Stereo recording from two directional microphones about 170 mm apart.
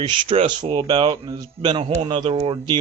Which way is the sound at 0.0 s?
30° right (ahead or behind).